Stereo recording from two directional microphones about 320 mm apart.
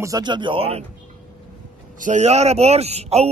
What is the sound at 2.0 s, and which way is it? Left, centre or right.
A man's voice, right.